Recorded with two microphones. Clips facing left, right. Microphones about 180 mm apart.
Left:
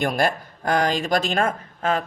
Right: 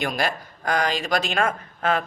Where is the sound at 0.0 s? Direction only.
50° left (ahead or behind).